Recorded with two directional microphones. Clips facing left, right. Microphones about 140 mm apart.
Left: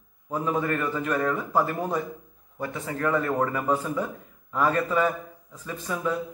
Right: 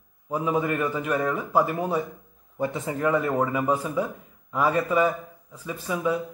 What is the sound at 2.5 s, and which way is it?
A man's voice, 20° right (ahead or behind).